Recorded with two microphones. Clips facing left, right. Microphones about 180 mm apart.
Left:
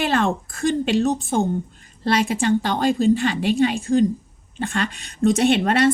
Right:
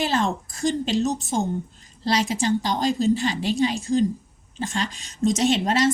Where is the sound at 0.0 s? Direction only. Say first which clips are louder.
Left 3 dB; 60° left (ahead or behind).